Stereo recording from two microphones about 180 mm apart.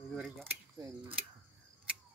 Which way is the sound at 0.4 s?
20° right (ahead or behind).